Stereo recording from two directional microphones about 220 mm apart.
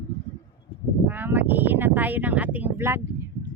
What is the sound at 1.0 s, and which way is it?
Speech, 10° right (ahead or behind).